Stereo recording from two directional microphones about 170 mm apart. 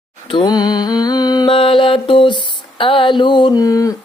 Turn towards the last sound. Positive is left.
turn(degrees=20)  # may be behind; listen again after turning